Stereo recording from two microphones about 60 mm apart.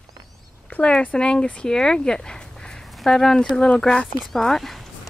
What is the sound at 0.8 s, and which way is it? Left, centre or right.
Speech, centre.